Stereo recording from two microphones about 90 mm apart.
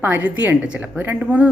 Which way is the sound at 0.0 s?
20° right (ahead or behind).